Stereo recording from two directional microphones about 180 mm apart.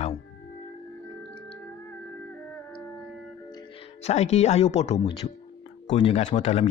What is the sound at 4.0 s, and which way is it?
Speech, 35° left (ahead or behind).